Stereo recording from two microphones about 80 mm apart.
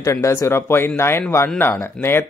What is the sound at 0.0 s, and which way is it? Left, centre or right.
A woman's voice, left.